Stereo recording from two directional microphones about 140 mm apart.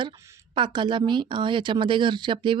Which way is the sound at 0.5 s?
35° right (ahead or behind).